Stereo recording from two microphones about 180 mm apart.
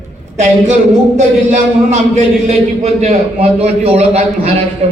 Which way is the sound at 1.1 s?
40° right (ahead or behind).